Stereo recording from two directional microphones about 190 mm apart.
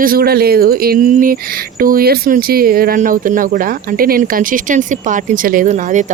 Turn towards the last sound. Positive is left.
turn(degrees=-45)  # may be behind; listen again after turning